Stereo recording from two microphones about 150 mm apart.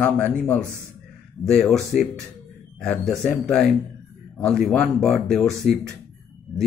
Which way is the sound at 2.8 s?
Centre (ahead or behind).